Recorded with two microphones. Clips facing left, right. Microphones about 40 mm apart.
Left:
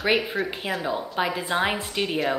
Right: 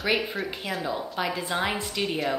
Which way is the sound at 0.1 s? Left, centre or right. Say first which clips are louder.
Left 3 dB; centre.